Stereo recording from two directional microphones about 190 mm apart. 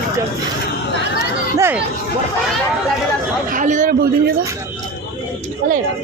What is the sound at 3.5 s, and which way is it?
Speech, 40° right (ahead or behind).